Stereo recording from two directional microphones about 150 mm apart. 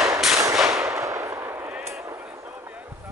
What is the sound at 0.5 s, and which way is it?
Gunshot, centre (ahead or behind).